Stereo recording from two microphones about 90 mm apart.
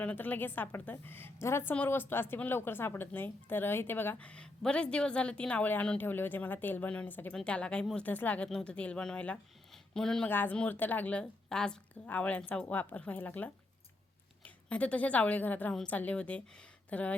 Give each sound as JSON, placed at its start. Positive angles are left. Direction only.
{"t": 0.0, "sound": "a woman's voice", "side_deg": 15}
{"t": 4.2, "sound": "a woman's voice", "side_deg": 15}
{"t": 9.7, "sound": "a sound", "side_deg": 5}
{"t": 10.2, "sound": "a woman's voice", "side_deg": 20}